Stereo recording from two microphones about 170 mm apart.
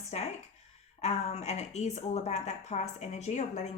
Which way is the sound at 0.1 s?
40° left (ahead or behind).